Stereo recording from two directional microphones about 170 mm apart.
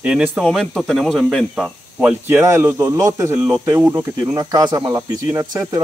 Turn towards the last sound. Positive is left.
turn(degrees=-20)  # may be behind; listen again after turning